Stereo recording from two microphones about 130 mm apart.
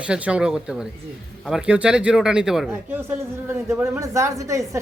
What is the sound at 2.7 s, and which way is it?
Speech, 20° right (ahead or behind).